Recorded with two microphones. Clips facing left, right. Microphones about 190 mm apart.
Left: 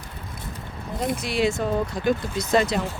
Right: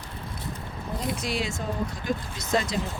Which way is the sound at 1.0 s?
60° left (ahead or behind).